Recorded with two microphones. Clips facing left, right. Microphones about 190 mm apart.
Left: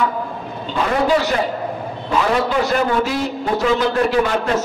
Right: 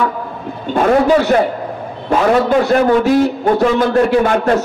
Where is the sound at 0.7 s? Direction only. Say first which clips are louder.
Right 6 dB; 50° right (ahead or behind).